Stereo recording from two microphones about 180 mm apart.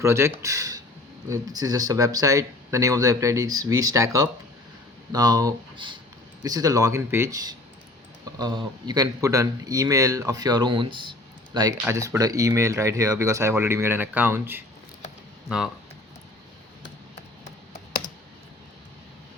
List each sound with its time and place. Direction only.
0.0 s speech: 15° right (ahead or behind)